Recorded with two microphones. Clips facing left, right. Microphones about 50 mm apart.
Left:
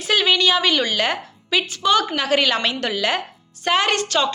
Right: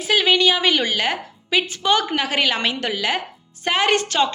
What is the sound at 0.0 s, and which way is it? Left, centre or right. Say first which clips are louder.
A woman's voice: right 1 dB; centre.